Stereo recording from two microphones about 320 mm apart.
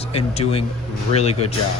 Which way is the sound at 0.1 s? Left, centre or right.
Centre.